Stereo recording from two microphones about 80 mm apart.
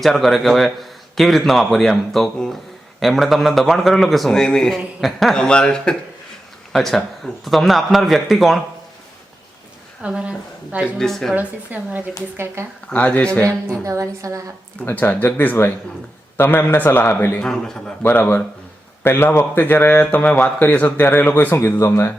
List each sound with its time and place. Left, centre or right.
0.0 s a man's voice: centre
10.0 s a woman's voice: centre
10.9 s a man's voice: centre
11.3 s a woman's voice: right
12.6 s a woman's voice: right
12.9 s speech: centre
13.5 s a woman's voice: right
14.8 s speech: left
17.4 s speech: centre
18.0 s speech: left
19.0 s speech: left
19.6 s speech: left
21.5 s speech: left